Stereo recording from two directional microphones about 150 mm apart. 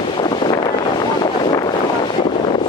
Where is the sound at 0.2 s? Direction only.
35° left (ahead or behind).